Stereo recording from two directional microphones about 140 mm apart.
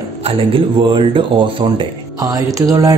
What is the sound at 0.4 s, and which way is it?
Speech, 40° right (ahead or behind).